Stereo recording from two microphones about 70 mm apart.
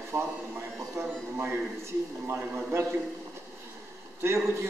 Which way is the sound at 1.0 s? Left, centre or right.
Right.